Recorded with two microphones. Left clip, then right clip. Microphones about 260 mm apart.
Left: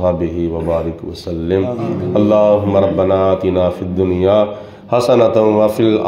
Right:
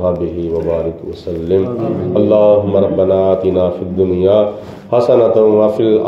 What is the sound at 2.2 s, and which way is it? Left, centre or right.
A man's voice, left.